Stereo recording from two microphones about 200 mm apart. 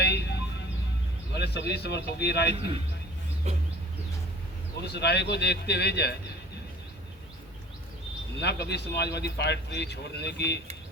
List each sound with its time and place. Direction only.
0.0 s music: 55° left (ahead or behind)
1.3 s speech: 55° left (ahead or behind)
3.5 s a sound: 35° right (ahead or behind)
4.9 s speech: 55° left (ahead or behind)
8.4 s speech: 55° left (ahead or behind)